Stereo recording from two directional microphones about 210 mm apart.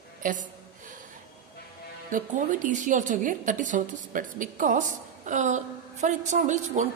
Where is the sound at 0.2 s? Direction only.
40° right (ahead or behind).